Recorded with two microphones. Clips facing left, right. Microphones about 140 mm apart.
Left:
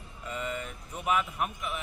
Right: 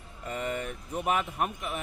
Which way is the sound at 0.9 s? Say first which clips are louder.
Even; 35° right (ahead or behind).